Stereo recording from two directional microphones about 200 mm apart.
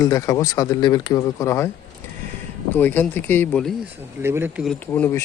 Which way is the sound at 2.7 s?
10° left (ahead or behind).